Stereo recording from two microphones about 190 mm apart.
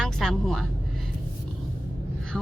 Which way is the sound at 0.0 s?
Centre (ahead or behind).